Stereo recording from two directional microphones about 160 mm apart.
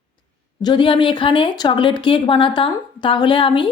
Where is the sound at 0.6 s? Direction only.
30° left (ahead or behind).